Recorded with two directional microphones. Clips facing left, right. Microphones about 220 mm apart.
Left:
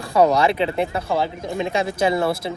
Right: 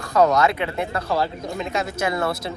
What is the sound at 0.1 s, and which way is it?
Speech, 10° left (ahead or behind).